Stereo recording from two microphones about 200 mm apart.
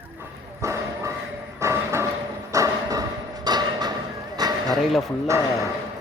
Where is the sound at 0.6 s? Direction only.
15° right (ahead or behind).